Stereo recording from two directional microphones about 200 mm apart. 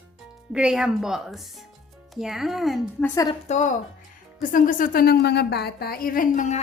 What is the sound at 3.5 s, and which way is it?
A woman's voice, 35° left (ahead or behind).